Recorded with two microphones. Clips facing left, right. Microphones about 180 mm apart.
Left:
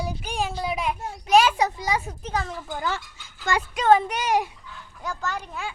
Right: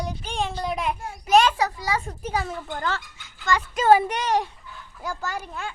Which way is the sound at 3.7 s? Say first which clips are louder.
Right 1 dB; 5° right (ahead or behind).